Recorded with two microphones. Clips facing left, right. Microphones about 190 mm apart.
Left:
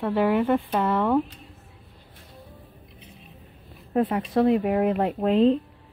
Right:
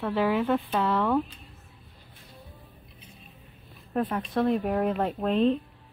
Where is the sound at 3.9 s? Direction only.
20° left (ahead or behind).